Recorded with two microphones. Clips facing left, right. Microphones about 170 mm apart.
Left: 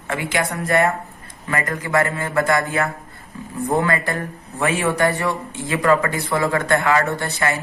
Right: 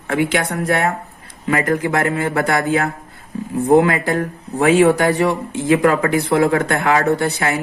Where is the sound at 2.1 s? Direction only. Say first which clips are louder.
Right 3 dB; 65° right (ahead or behind).